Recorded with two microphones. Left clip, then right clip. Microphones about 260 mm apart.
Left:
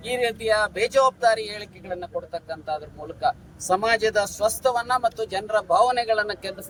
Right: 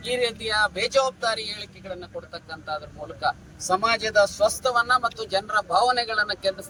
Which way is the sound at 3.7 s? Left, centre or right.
Left.